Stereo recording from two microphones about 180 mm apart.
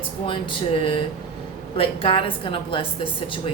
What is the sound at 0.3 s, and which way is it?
A woman's voice, 30° left (ahead or behind).